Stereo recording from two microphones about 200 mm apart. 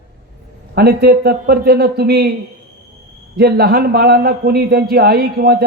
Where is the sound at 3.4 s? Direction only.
50° right (ahead or behind).